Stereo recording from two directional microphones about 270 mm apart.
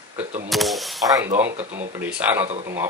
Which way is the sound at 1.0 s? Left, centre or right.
Centre.